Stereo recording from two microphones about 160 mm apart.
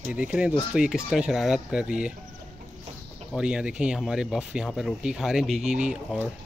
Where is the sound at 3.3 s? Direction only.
5° right (ahead or behind).